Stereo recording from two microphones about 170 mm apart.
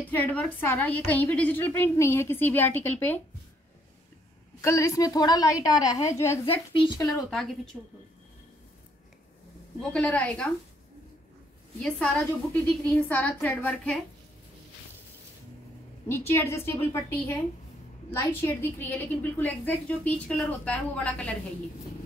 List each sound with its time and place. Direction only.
0.0 s a woman's voice: 10° left (ahead or behind)
4.6 s a woman's voice: 15° left (ahead or behind)
6.4 s a woman's voice: 30° left (ahead or behind)
7.2 s a woman's voice: 5° left (ahead or behind)
9.8 s a woman's voice: 5° left (ahead or behind)
11.8 s a woman's voice: 5° left (ahead or behind)
16.1 s a woman's voice: 15° left (ahead or behind)